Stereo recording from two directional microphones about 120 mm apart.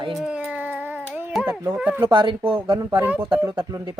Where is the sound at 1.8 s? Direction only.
10° right (ahead or behind).